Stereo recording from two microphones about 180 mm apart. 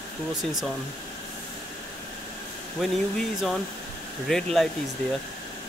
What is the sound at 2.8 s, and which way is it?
Speech, centre (ahead or behind).